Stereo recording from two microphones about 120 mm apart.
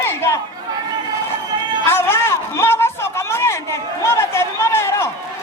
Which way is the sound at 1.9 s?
20° left (ahead or behind).